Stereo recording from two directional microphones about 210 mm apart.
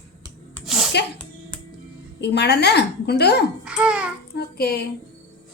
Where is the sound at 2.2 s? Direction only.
55° left (ahead or behind).